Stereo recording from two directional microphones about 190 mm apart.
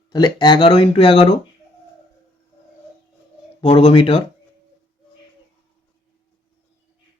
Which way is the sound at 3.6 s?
30° left (ahead or behind).